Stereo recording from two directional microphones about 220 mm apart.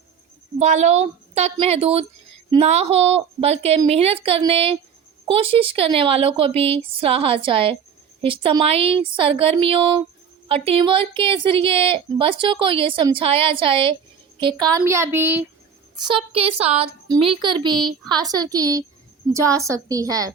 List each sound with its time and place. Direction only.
0.6 s a woman's voice: 30° right (ahead or behind); by 15.4 s 10° right (ahead or behind)
16.0 s a woman's voice: 25° right (ahead or behind)